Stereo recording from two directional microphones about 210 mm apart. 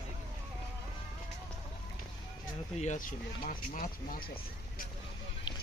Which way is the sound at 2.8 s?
40° left (ahead or behind).